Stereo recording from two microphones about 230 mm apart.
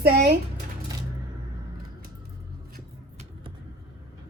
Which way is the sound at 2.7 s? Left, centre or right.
Right.